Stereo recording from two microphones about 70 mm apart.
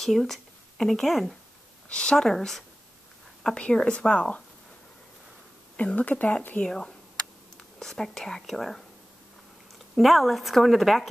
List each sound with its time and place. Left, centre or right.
0.0 s speech: centre
1.9 s speech: centre
5.8 s speech: centre
9.9 s speech: centre